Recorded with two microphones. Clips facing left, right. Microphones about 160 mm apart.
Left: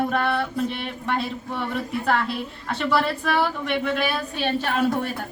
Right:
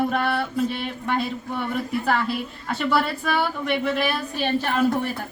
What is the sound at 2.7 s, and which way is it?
A woman's voice, 5° right (ahead or behind).